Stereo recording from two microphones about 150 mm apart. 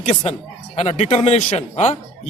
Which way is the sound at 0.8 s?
50° left (ahead or behind).